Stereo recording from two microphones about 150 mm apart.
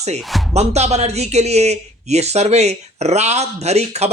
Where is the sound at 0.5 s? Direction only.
45° right (ahead or behind).